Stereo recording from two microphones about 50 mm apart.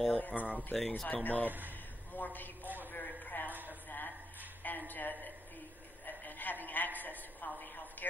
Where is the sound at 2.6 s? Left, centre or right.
Right.